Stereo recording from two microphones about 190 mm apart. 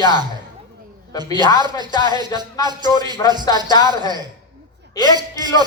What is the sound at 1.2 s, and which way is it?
A man's voice, 20° right (ahead or behind).